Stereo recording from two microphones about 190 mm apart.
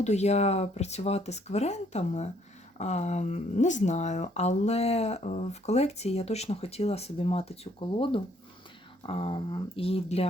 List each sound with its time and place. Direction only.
0.0 s speech: 35° left (ahead or behind)